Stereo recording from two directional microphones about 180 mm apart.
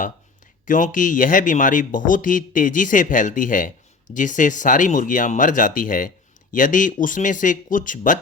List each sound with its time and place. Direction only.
0.6 s speech: 45° left (ahead or behind)